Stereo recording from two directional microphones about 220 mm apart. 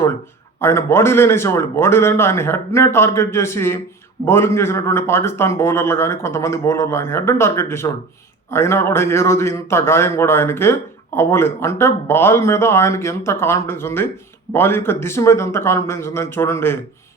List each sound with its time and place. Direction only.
0.6 s a man's voice: 10° left (ahead or behind)